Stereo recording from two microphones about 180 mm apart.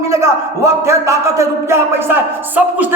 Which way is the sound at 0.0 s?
15° right (ahead or behind).